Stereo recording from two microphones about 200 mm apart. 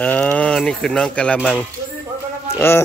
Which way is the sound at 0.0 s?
5° left (ahead or behind).